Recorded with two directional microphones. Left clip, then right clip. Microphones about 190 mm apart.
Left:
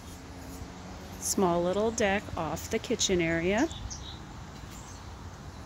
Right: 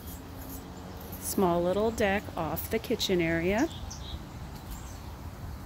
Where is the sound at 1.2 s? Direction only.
5° left (ahead or behind).